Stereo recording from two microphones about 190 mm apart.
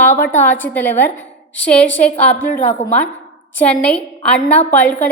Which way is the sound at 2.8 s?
40° left (ahead or behind).